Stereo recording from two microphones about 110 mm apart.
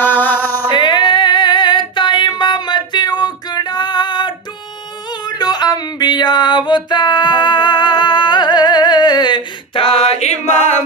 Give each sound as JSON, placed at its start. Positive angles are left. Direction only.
{"t": 0.0, "sound": "music", "side_deg": 15}
{"t": 0.7, "sound": "female singing", "side_deg": 45}
{"t": 9.8, "sound": "a sound", "side_deg": 65}